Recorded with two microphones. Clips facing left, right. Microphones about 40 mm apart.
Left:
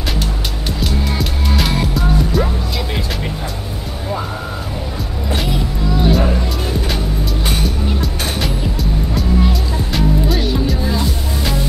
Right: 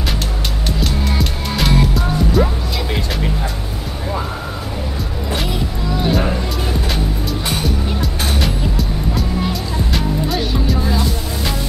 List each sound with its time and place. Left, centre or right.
0.7 s music: centre
5.3 s music: centre
7.6 s music: centre